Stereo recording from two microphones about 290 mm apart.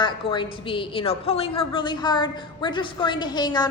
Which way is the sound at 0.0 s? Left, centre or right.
Centre.